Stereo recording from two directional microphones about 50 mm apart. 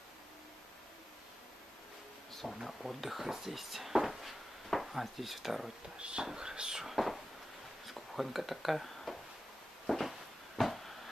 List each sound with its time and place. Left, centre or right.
2.3 s speech: centre
5.9 s speech: centre
7.8 s a sound: centre